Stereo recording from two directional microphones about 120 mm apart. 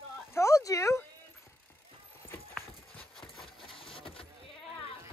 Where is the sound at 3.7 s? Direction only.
50° left (ahead or behind).